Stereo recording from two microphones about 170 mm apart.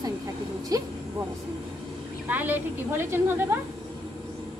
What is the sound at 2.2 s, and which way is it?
Speech, 10° right (ahead or behind).